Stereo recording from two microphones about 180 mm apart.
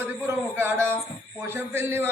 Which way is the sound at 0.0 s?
10° right (ahead or behind).